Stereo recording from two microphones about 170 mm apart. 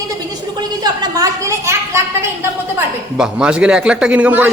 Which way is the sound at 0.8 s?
20° right (ahead or behind).